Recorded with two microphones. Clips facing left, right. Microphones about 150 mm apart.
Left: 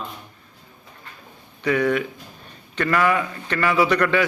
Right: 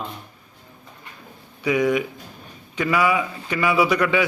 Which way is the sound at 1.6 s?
10° right (ahead or behind).